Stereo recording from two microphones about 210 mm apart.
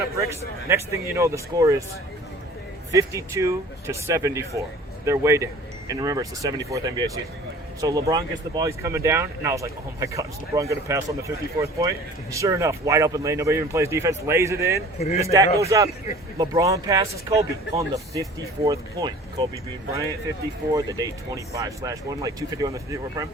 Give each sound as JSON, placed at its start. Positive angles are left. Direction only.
{"t": 0.2, "sound": "speech", "side_deg": -15}
{"t": 2.9, "sound": "speech", "side_deg": -15}
{"t": 14.9, "sound": "speech", "side_deg": 30}
{"t": 15.2, "sound": "speech", "side_deg": -15}
{"t": 20.7, "sound": "speech", "side_deg": -15}